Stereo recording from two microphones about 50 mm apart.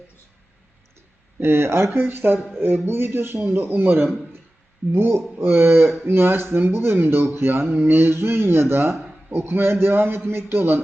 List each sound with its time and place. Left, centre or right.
1.4 s speech: right